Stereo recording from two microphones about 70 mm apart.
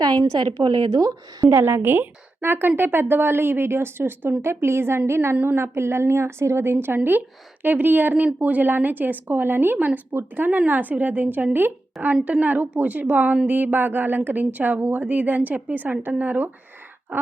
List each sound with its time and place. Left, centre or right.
0.3 s a woman's voice: right
1.5 s a woman's voice: right